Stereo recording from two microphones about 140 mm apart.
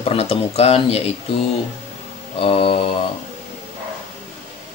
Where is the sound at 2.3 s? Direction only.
40° left (ahead or behind).